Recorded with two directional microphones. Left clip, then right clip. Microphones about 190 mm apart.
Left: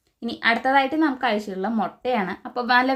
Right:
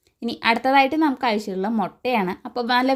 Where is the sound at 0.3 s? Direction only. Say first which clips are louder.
Right 1 dB; 35° right (ahead or behind).